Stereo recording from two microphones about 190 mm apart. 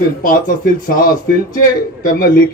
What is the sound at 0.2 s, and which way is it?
Speech, 45° left (ahead or behind).